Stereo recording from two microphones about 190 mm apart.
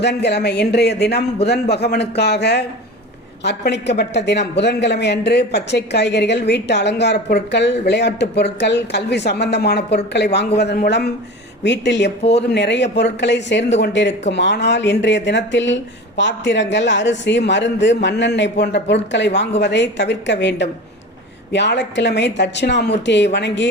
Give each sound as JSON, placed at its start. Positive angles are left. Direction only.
{"t": 0.0, "sound": "speech", "side_deg": 60}